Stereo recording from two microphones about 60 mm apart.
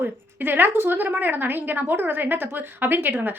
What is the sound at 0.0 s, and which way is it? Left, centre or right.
A woman's voice, right.